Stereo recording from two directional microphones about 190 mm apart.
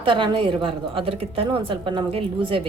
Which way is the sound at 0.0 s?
25° right (ahead or behind).